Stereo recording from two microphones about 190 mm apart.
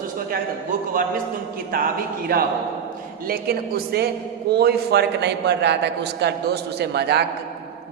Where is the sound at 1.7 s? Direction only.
50° right (ahead or behind).